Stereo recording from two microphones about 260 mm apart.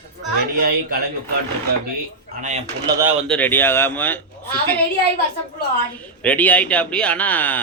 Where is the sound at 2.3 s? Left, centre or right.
Right.